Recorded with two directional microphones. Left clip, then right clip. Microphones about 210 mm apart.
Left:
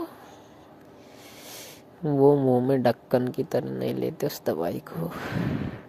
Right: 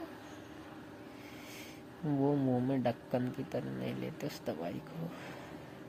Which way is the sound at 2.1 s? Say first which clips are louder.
Left 13 dB; 35° left (ahead or behind).